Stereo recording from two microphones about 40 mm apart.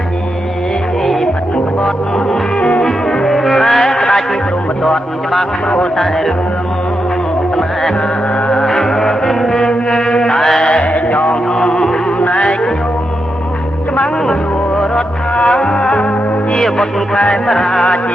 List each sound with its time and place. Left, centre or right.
2.6 s music: left
2.8 s music: centre
3.2 s music: centre
8.6 s music: centre
10.6 s music: left
10.9 s music: left
11.6 s music: left
15.4 s music: left
17.4 s music: centre